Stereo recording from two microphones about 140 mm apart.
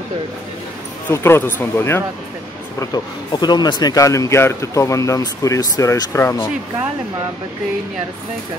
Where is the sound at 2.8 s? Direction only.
30° left (ahead or behind).